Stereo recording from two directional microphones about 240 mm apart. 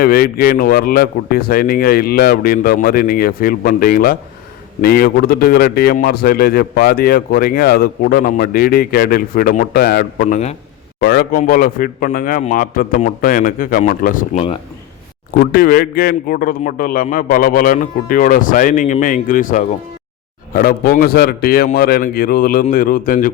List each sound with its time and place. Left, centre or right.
0.0 s a man's voice: left
15.4 s a man's voice: left